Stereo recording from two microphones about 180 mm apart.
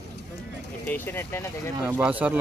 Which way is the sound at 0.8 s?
10° left (ahead or behind).